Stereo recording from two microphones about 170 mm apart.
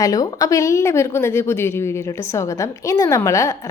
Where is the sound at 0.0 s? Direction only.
20° left (ahead or behind).